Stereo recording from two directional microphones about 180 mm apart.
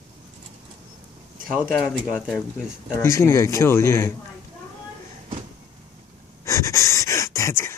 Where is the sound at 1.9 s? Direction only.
Centre (ahead or behind).